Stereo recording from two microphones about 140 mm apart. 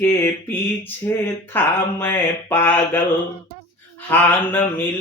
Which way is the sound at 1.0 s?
15° left (ahead or behind).